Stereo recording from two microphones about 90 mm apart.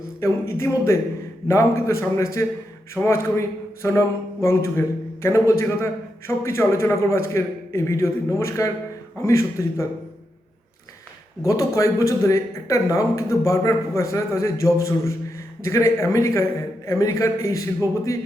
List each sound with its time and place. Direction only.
0.2 s a man's voice: 30° left (ahead or behind)
11.4 s a man's voice: 40° left (ahead or behind)